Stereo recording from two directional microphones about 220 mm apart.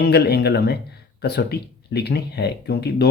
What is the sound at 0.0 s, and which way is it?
Speech, 45° left (ahead or behind).